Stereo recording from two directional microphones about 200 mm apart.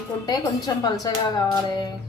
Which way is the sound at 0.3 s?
20° left (ahead or behind).